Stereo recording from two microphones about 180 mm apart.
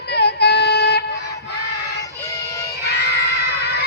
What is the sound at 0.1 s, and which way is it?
Child singing, 65° left (ahead or behind).